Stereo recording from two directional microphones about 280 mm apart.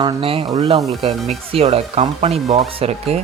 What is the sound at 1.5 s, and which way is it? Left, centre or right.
Speech, right.